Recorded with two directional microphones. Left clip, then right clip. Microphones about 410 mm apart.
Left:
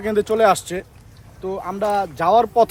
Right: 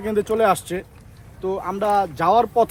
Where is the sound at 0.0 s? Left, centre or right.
Centre.